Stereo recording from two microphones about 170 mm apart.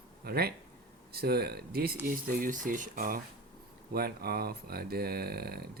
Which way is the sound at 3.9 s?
65° right (ahead or behind).